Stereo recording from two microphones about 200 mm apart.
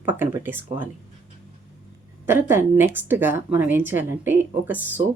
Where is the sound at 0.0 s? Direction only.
10° right (ahead or behind).